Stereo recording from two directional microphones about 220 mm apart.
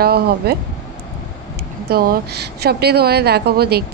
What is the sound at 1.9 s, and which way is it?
Speech, 45° right (ahead or behind).